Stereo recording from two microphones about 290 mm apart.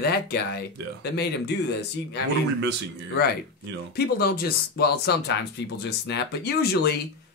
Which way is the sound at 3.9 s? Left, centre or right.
Left.